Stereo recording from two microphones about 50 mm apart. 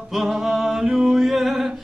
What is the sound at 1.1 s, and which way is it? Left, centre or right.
Music, centre.